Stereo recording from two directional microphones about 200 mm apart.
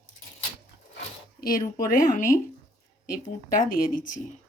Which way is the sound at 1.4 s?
45° left (ahead or behind).